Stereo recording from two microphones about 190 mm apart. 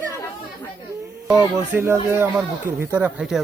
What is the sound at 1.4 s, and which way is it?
Speech, 15° right (ahead or behind).